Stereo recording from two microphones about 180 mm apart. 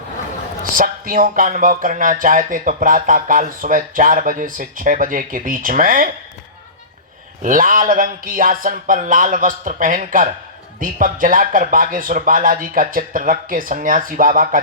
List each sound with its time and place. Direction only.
0.6 s speech: 50° right (ahead or behind)
7.4 s speech: 45° right (ahead or behind)